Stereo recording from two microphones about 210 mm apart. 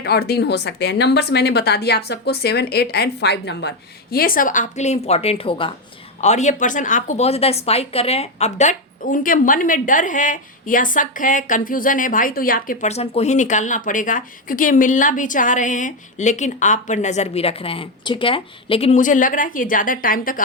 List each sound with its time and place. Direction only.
0.0 s a woman's voice: 50° left (ahead or behind)